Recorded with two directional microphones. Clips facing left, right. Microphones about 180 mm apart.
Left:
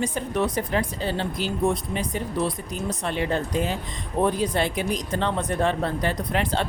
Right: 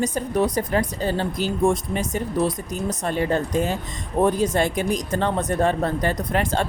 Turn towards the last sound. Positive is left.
turn(degrees=-45)  # may be behind; listen again after turning